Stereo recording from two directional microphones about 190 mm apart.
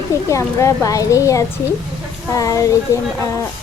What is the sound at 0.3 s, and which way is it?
A woman's voice, 15° left (ahead or behind).